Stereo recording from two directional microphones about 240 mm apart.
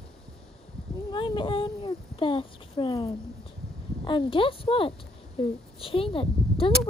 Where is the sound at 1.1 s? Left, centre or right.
Centre.